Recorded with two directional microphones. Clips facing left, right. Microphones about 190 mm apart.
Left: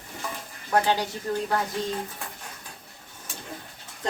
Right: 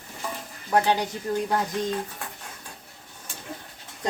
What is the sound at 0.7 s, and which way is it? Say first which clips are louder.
Speech: right 1 dB; 20° right (ahead or behind).